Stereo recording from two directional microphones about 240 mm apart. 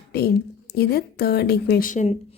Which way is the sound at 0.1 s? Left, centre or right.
Left.